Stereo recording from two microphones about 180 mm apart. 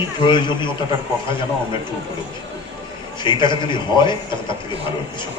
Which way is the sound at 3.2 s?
25° left (ahead or behind).